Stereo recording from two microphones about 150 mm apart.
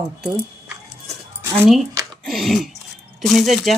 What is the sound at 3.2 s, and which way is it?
Speech, centre (ahead or behind).